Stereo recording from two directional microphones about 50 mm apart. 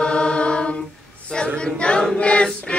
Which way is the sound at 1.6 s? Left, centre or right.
Left.